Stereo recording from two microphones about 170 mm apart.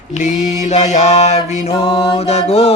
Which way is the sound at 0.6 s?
40° left (ahead or behind).